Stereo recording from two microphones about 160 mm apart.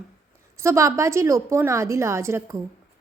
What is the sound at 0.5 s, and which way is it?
A woman's voice, 20° right (ahead or behind).